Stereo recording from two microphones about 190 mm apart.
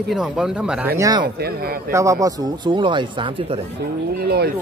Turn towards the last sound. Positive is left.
turn(degrees=-55)  # may be behind; listen again after turning